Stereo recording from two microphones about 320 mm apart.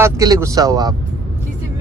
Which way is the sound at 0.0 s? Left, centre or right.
Centre.